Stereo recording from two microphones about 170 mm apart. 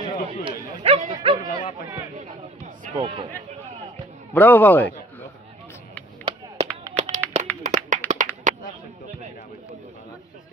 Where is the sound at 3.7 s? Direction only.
30° right (ahead or behind).